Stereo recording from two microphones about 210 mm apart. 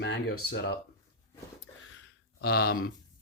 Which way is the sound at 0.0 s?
60° left (ahead or behind).